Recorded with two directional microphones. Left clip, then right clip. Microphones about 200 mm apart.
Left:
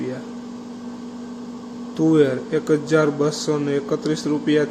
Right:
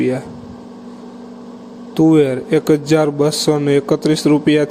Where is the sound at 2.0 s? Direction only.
35° right (ahead or behind).